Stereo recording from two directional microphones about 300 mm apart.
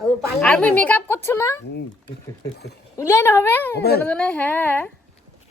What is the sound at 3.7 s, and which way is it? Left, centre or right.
Speech, left.